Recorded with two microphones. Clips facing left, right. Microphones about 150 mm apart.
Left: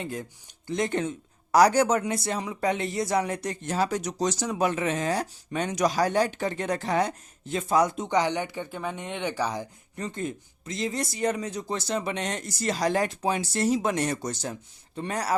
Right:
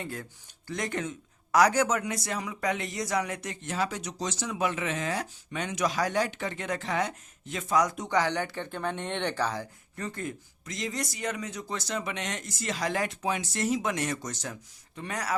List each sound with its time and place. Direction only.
0.0 s speech: 20° left (ahead or behind); by 15.4 s 35° left (ahead or behind)